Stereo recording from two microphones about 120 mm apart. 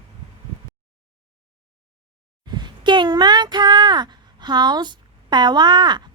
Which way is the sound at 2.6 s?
40° right (ahead or behind).